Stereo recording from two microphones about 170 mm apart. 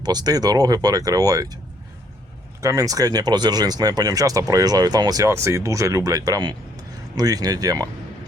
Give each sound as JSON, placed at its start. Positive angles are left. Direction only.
{"t": 0.0, "sound": "speech", "side_deg": -25}
{"t": 2.6, "sound": "speech", "side_deg": -20}